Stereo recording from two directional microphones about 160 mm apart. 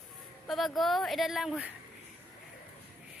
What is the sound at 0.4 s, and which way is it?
Speech, centre (ahead or behind).